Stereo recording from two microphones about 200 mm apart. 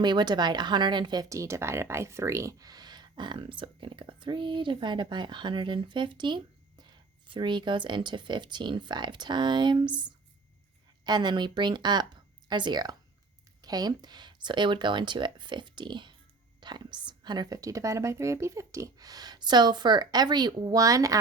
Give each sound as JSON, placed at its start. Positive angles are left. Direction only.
{"t": 0.0, "sound": "speech", "side_deg": -20}
{"t": 11.0, "sound": "speech", "side_deg": -20}